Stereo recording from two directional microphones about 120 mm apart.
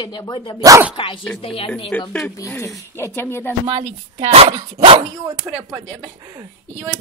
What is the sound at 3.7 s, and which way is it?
Speech, 55° right (ahead or behind).